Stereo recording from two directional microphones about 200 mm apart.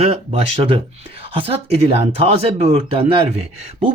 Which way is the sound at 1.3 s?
30° right (ahead or behind).